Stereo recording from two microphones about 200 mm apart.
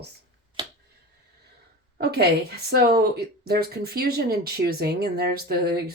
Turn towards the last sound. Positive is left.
turn(degrees=-50)  # may be behind; listen again after turning